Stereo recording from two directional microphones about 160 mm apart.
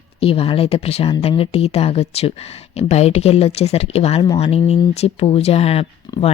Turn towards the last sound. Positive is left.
turn(degrees=40)  # may be behind; listen again after turning